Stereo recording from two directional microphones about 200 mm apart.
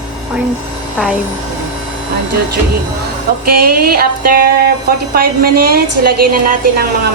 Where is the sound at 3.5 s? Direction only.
50° right (ahead or behind).